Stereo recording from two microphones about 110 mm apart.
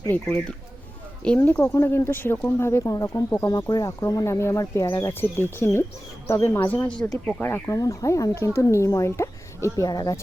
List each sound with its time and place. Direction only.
0.1 s speech: 15° left (ahead or behind)
1.4 s speech: 20° left (ahead or behind)
9.7 s speech: 35° left (ahead or behind)